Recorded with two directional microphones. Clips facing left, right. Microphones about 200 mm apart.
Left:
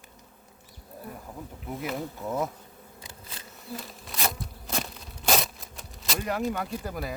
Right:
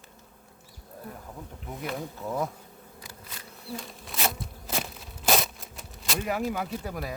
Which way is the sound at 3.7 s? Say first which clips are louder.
Right 1 dB; centre (ahead or behind).